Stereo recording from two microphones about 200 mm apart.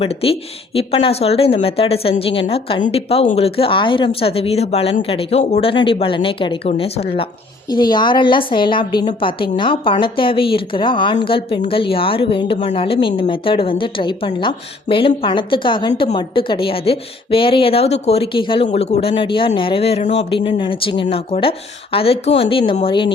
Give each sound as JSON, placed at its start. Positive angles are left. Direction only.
{"t": 0.0, "sound": "a woman's voice", "side_deg": 30}